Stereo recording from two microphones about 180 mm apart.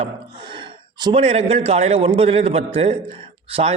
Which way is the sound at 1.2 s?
35° right (ahead or behind).